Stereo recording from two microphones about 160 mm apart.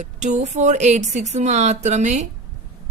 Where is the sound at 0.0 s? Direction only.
45° right (ahead or behind).